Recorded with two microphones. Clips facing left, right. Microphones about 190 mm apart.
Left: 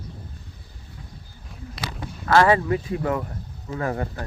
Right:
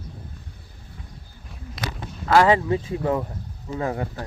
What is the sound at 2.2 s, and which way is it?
Speech, 15° right (ahead or behind).